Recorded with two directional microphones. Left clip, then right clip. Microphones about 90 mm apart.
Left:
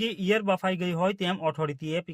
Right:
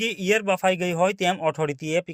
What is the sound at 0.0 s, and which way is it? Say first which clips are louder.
Speech: right 4 dB; 30° right (ahead or behind).